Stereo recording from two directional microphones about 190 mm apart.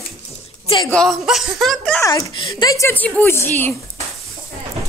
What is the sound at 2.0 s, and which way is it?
Speech, 25° left (ahead or behind).